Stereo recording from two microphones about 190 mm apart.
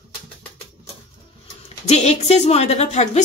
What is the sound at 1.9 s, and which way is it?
A woman's voice, 35° left (ahead or behind).